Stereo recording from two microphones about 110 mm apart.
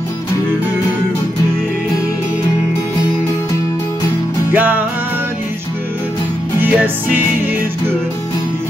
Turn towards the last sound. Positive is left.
turn(degrees=-15)  # may be behind; listen again after turning